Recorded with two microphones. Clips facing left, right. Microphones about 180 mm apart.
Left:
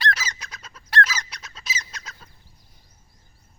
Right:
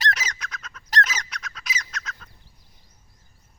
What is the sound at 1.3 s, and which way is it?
Chicken, 30° left (ahead or behind).